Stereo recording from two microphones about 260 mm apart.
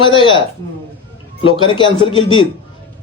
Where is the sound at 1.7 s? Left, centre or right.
Centre.